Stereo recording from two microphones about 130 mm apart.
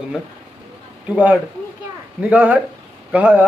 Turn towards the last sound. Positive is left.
turn(degrees=-10)  # may be behind; listen again after turning